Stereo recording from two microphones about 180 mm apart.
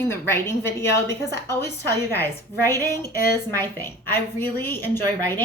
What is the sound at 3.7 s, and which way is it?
A woman's voice, 10° left (ahead or behind).